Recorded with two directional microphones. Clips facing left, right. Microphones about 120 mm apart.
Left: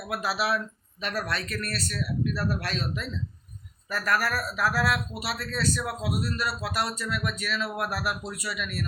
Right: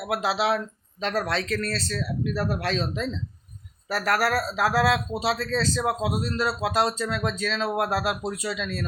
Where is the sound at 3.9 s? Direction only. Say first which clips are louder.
Right 4 dB; 90° right.